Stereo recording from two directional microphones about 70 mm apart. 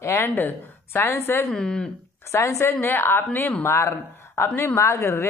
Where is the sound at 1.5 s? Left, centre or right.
Centre.